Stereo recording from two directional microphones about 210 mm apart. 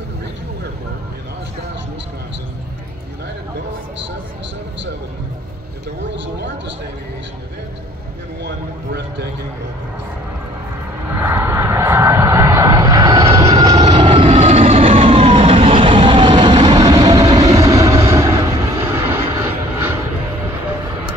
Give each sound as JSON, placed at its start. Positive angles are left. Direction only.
{"t": 8.5, "sound": "a man's voice", "side_deg": -50}
{"t": 11.1, "sound": "vehicle", "side_deg": -10}
{"t": 13.6, "sound": "emergency vehicle", "side_deg": -20}